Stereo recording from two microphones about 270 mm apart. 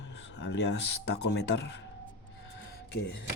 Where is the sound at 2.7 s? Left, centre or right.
Left.